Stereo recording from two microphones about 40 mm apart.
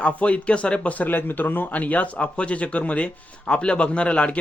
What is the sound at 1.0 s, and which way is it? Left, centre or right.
A man's voice, left.